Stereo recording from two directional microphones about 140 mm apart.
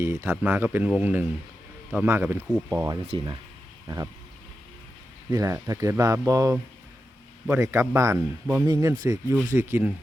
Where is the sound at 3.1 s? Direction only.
30° right (ahead or behind).